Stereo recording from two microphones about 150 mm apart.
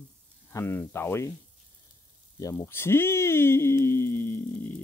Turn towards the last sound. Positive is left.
turn(degrees=15)  # may be behind; listen again after turning